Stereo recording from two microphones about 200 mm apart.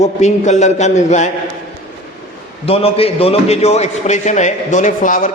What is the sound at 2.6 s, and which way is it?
A man's voice, 30° left (ahead or behind).